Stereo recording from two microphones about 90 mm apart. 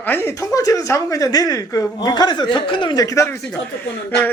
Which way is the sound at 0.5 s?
40° left (ahead or behind).